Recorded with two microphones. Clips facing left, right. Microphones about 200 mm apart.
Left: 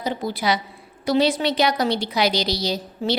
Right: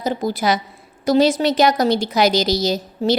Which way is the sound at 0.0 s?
45° right (ahead or behind).